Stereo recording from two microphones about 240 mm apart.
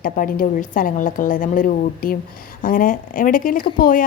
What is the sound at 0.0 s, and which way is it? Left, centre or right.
A woman's voice, left.